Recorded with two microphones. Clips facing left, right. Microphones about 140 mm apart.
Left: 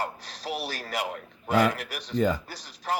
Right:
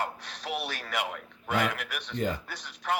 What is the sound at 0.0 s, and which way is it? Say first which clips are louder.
A man's voice: left 1 dB; 35° left (ahead or behind).